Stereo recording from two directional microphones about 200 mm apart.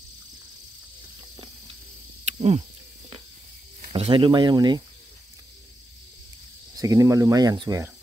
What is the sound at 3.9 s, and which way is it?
Speech, 25° right (ahead or behind).